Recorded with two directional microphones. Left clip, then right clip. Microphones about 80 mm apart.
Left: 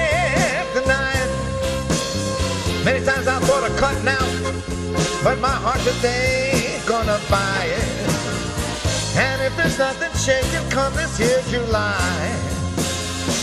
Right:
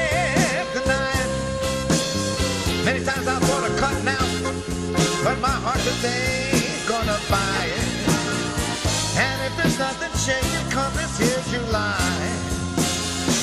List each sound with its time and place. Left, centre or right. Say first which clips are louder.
0.0 s music: left 3 dB; centre
2.8 s music: left 6 dB; centre
9.2 s music: left 5 dB; centre